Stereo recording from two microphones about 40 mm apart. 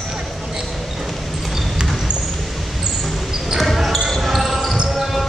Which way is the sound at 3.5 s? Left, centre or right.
Centre.